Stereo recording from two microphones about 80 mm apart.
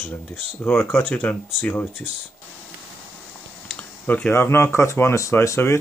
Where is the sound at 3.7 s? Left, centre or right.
Left.